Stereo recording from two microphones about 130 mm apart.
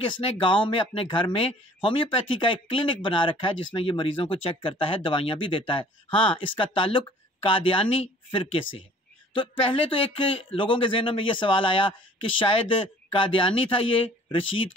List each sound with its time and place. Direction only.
0.0 s speech: 40° left (ahead or behind)